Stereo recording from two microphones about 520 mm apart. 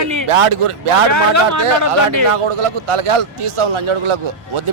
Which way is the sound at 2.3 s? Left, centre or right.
Right.